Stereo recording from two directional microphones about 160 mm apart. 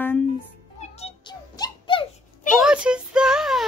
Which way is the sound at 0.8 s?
40° left (ahead or behind).